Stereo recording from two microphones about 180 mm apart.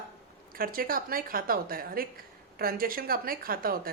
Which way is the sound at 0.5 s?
55° right (ahead or behind).